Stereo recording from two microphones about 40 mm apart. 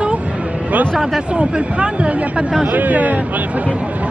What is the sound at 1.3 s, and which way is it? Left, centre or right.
Speech, right.